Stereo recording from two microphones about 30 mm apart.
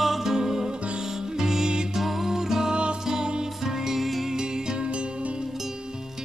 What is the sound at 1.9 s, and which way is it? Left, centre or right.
Music, centre.